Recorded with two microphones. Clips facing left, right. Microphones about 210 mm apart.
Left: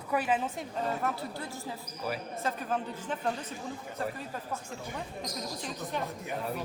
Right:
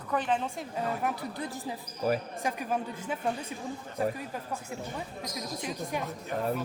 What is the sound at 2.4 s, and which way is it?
Speech, 10° right (ahead or behind).